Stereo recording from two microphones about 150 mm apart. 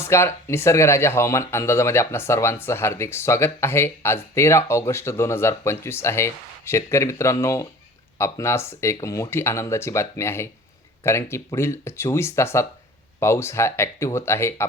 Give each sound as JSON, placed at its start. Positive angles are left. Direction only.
{"t": 0.0, "sound": "speech", "side_deg": 15}